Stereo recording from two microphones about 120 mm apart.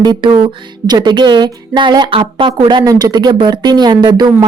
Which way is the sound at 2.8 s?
30° right (ahead or behind).